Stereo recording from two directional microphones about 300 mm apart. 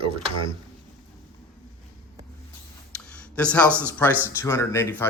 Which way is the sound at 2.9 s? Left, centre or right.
Centre.